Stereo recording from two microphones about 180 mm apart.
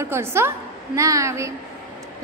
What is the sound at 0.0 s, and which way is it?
A woman's voice, 15° right (ahead or behind).